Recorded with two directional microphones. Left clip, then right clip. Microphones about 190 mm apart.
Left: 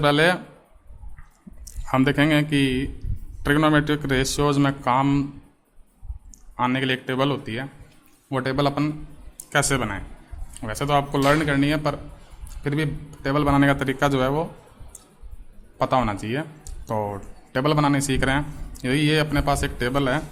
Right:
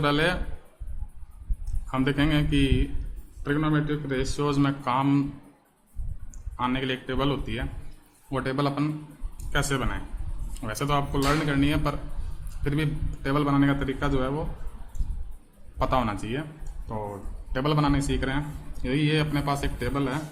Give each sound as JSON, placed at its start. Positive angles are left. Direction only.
{"t": 0.0, "sound": "a man's voice", "side_deg": 35}
{"t": 1.9, "sound": "a man's voice", "side_deg": 35}
{"t": 3.4, "sound": "a man's voice", "side_deg": 50}
{"t": 6.6, "sound": "a man's voice", "side_deg": 30}
{"t": 15.8, "sound": "a man's voice", "side_deg": 25}